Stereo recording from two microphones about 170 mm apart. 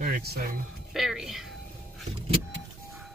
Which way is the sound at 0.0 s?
65° right (ahead or behind).